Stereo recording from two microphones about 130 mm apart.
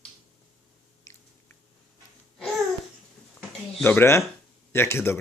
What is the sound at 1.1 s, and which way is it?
Biting, 25° left (ahead or behind).